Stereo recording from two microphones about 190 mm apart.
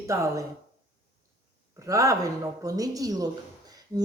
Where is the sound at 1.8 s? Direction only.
15° right (ahead or behind).